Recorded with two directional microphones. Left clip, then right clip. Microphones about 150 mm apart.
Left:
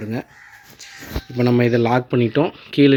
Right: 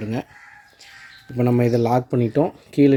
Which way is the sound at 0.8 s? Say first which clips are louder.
Left 10 dB; 5° right (ahead or behind).